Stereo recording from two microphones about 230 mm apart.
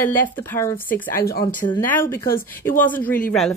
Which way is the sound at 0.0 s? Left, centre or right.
Centre.